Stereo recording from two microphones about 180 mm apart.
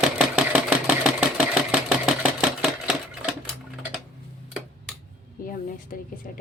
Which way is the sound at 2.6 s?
Centre (ahead or behind).